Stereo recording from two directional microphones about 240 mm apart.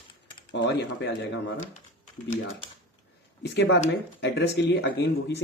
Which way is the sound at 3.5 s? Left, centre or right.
Left.